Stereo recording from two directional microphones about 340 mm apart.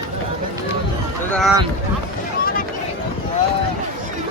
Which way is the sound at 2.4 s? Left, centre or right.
Left.